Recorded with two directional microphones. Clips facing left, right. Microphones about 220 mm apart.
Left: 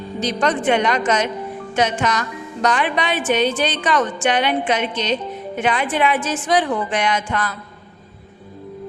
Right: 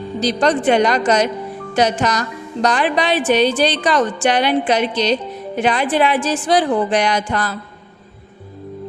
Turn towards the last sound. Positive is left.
turn(degrees=-35)  # may be behind; listen again after turning